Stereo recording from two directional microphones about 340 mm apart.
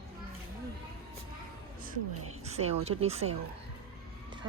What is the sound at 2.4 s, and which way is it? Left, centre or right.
Speech, centre.